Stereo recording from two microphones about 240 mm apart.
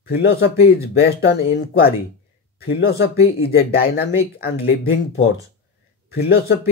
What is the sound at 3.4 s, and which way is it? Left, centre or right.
Speech, left.